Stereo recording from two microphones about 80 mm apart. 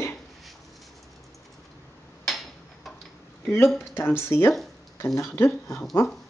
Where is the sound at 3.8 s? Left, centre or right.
Left.